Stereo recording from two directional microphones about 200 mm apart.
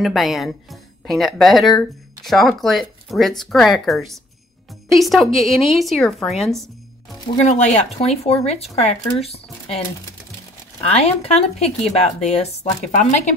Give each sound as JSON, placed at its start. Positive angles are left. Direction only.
{"t": 0.0, "sound": "speech", "side_deg": 0}
{"t": 7.4, "sound": "speech", "side_deg": 35}
{"t": 10.8, "sound": "speech", "side_deg": 30}